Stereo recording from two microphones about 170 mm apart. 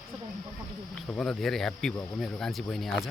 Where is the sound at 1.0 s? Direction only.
5° left (ahead or behind).